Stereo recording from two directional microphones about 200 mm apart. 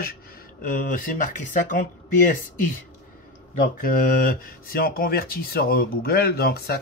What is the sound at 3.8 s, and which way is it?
Speech, 45° left (ahead or behind).